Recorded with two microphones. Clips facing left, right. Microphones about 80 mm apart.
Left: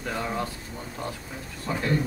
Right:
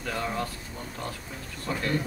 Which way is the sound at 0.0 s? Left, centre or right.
Centre.